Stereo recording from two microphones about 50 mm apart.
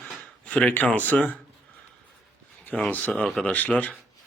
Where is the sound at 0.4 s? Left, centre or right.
Left.